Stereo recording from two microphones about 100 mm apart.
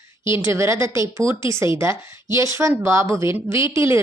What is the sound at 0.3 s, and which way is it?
A woman's voice, 25° right (ahead or behind).